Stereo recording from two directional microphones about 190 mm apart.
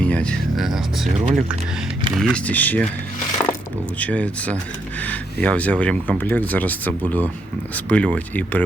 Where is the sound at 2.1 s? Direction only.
5° left (ahead or behind).